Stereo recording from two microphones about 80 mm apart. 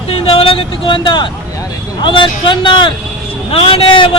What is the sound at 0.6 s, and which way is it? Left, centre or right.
A man's voice, left.